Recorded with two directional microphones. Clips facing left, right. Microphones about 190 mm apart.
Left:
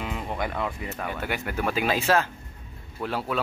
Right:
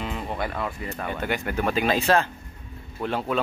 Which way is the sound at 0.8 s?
5° left (ahead or behind).